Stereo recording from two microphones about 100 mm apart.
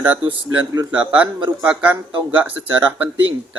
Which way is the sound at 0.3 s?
20° right (ahead or behind).